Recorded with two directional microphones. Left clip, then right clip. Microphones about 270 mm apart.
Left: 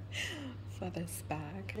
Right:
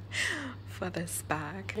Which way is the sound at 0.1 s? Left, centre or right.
Centre.